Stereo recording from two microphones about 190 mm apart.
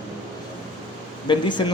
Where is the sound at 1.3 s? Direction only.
25° left (ahead or behind).